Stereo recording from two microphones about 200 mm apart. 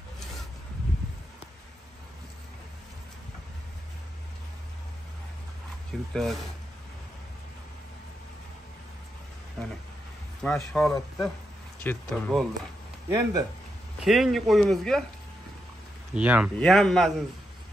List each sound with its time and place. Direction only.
5.9 s speech: centre (ahead or behind)
9.6 s a sound: centre (ahead or behind)
10.4 s speech: 5° left (ahead or behind)
13.1 s speech: 15° right (ahead or behind)
14.0 s speech: centre (ahead or behind)
16.2 s speech: 5° right (ahead or behind)